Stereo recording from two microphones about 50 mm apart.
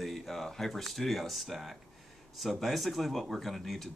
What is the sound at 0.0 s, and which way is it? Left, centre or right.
Speech, centre.